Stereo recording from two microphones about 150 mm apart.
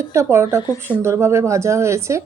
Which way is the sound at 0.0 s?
20° right (ahead or behind).